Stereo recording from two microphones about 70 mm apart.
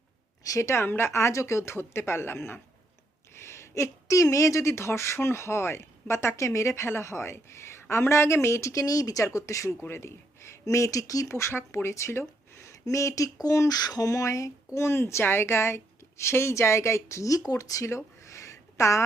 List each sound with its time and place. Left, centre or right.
0.4 s speech: left
13.7 s speech: left